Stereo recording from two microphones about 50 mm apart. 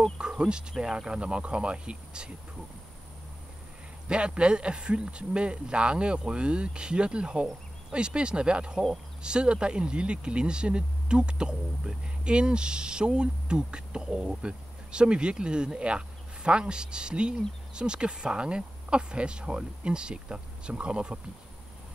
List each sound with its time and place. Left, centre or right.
0.2 s speech: centre
4.1 s speech: right